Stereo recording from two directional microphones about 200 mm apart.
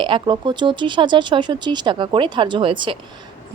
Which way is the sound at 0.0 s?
25° right (ahead or behind).